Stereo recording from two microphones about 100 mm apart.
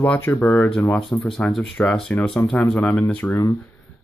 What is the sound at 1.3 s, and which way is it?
Speech, 5° left (ahead or behind).